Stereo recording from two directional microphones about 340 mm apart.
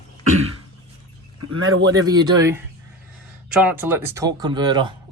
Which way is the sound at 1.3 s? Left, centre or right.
Right.